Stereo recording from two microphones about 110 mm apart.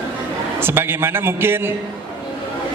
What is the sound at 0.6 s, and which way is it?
A man's voice, 20° right (ahead or behind).